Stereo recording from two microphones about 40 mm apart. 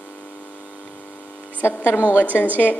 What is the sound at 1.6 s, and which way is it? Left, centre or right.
Speech, left.